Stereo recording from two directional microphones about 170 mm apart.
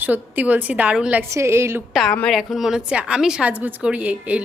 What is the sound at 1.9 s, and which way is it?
A woman's voice, centre (ahead or behind).